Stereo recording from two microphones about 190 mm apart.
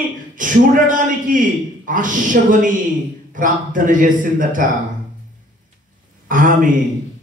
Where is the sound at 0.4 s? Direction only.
45° right (ahead or behind).